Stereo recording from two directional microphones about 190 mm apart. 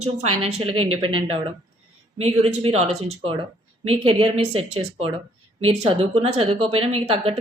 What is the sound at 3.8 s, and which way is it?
A woman's voice, 30° right (ahead or behind).